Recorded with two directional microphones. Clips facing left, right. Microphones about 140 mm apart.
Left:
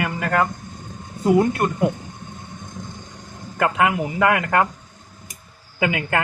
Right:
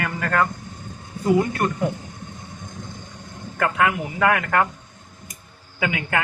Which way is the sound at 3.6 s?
20° left (ahead or behind).